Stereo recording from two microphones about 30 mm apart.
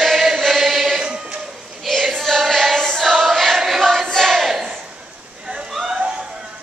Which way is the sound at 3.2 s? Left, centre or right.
Centre.